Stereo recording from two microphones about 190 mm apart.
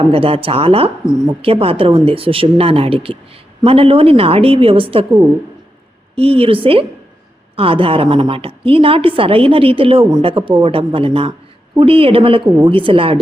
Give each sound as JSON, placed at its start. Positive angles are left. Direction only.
{"t": 0.1, "sound": "a woman's voice", "side_deg": -30}
{"t": 6.1, "sound": "a woman's voice", "side_deg": -30}